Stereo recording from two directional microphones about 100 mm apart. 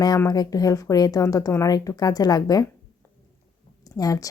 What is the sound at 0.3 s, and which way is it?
Speech, 40° left (ahead or behind).